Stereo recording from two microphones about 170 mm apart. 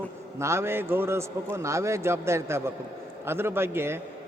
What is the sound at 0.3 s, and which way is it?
A man's voice, 15° right (ahead or behind).